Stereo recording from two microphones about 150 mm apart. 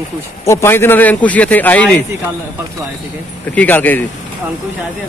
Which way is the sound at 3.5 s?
10° left (ahead or behind).